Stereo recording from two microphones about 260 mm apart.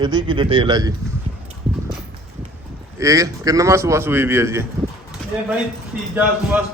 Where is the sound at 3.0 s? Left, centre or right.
Centre.